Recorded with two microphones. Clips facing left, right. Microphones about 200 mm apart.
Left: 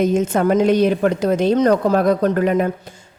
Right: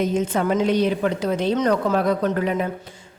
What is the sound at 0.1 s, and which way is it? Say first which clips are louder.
A woman's voice: left 5 dB; 45° left (ahead or behind).